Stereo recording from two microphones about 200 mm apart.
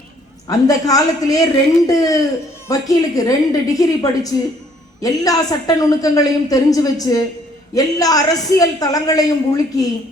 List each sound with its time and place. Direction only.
0.4 s a woman's voice: 15° left (ahead or behind)